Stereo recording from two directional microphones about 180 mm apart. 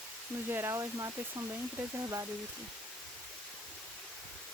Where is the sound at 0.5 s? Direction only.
15° right (ahead or behind).